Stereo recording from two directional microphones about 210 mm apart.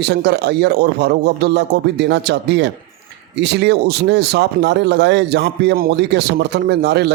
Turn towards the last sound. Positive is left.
turn(degrees=-55)  # may be behind; listen again after turning